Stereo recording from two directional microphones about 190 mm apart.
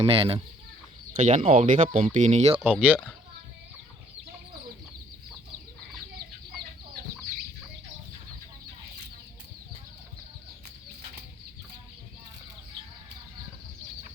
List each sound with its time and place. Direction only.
0.0 s chicken: 30° right (ahead or behind)
1.1 s speech: 45° right (ahead or behind)
2.6 s speech: 5° right (ahead or behind)